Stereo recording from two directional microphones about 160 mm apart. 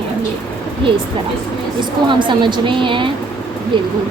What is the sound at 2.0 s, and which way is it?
A woman's voice, 30° right (ahead or behind).